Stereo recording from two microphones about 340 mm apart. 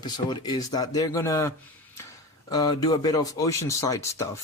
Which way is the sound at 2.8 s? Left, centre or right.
Centre.